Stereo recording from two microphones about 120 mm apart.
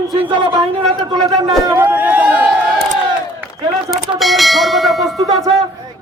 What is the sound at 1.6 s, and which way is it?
Speech, 20° right (ahead or behind).